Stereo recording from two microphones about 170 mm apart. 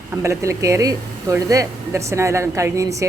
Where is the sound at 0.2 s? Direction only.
15° right (ahead or behind).